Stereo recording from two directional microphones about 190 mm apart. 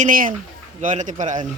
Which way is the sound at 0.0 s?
45° right (ahead or behind).